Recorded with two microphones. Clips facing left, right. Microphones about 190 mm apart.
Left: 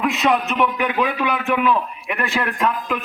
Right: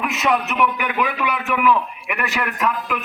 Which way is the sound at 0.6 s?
25° left (ahead or behind).